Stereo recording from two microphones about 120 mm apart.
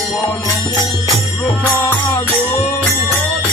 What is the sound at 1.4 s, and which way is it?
Music, 15° left (ahead or behind).